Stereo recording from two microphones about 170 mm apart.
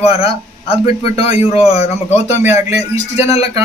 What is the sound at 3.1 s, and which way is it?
Speech, 40° left (ahead or behind).